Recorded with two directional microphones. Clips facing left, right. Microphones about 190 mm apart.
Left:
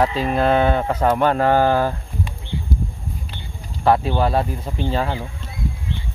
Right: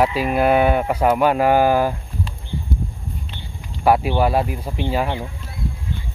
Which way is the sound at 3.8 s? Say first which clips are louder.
Right 1 dB; 10° right (ahead or behind).